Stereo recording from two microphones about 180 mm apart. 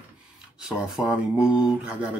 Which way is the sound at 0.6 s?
5° right (ahead or behind).